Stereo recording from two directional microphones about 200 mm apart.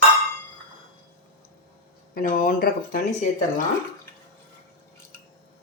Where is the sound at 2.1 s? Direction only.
45° left (ahead or behind).